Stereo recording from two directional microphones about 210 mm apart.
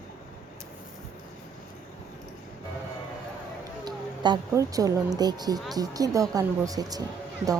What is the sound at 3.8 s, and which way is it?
A woman's voice, 20° right (ahead or behind).